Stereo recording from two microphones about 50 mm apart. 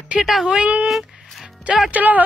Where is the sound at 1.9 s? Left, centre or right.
Right.